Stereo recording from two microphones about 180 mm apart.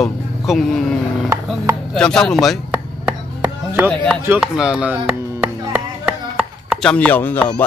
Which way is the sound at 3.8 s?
5° left (ahead or behind).